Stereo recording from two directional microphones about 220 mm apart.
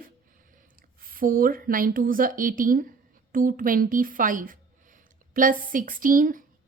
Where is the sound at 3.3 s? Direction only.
40° right (ahead or behind).